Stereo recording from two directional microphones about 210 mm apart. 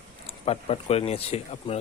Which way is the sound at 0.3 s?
30° left (ahead or behind).